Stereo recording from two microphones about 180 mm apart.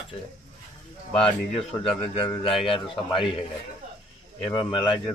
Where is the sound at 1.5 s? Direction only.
30° left (ahead or behind).